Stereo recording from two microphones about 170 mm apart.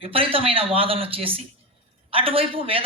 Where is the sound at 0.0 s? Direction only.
30° right (ahead or behind).